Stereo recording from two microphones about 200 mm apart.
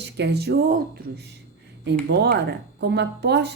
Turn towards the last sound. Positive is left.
turn(degrees=-55)  # may be behind; listen again after turning